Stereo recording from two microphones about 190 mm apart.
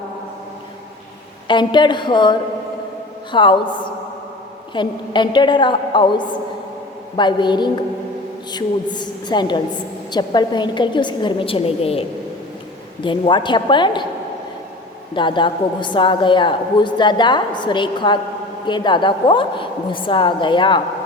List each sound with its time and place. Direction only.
1.5 s a woman's voice: 25° left (ahead or behind)
4.7 s a woman's voice: 25° left (ahead or behind)
15.1 s a woman's voice: 25° left (ahead or behind)